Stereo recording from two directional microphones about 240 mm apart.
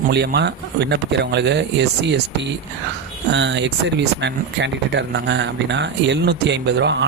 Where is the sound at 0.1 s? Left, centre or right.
Right.